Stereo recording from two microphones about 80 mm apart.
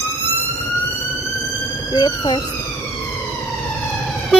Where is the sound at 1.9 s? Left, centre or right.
Left.